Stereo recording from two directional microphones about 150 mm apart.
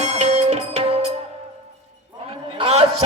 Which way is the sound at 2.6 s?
45° right (ahead or behind).